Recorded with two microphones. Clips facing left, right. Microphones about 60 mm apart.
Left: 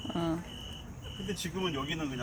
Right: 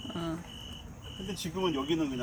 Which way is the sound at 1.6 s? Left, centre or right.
Centre.